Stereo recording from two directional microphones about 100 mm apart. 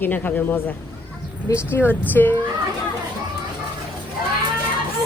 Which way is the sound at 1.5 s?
35° left (ahead or behind).